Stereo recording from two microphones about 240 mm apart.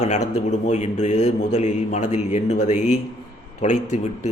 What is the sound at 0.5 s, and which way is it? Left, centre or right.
Speech, left.